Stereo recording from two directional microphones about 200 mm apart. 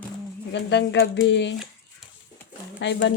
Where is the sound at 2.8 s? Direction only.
65° left (ahead or behind).